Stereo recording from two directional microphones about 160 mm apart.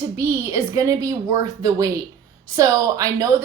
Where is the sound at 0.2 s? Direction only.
15° right (ahead or behind).